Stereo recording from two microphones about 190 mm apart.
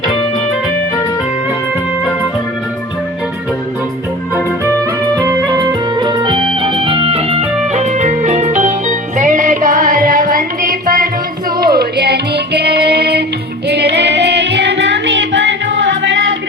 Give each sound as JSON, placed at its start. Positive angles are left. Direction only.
{"t": 5.1, "sound": "music", "side_deg": -20}